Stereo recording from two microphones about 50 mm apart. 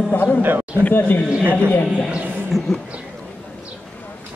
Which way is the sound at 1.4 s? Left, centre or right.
Right.